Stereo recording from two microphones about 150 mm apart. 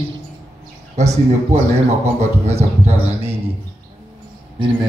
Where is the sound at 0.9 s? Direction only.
50° right (ahead or behind).